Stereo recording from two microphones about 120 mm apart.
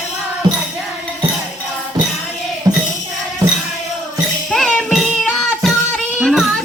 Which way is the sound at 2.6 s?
30° right (ahead or behind).